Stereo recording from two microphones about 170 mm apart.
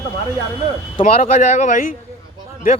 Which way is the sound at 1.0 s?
45° left (ahead or behind).